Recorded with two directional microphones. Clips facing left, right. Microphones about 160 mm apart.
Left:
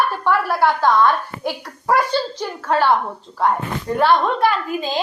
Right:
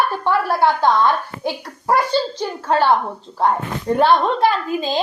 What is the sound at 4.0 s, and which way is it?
Speech, 25° right (ahead or behind).